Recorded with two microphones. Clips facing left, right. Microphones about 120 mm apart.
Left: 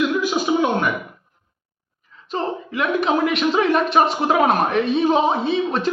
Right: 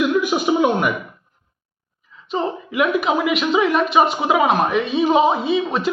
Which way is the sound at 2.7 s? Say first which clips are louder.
Right 1 dB; 10° right (ahead or behind).